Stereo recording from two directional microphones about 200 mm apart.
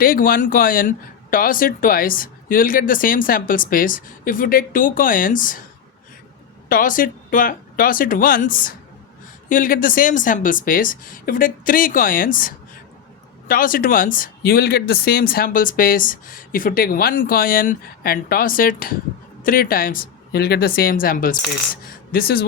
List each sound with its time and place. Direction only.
0.0 s speech: 45° left (ahead or behind)
6.7 s speech: 45° left (ahead or behind)